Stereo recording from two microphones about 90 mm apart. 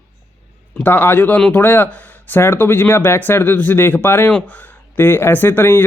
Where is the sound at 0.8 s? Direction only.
20° left (ahead or behind).